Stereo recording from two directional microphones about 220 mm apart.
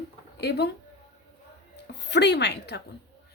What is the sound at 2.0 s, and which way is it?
Speech, 50° left (ahead or behind).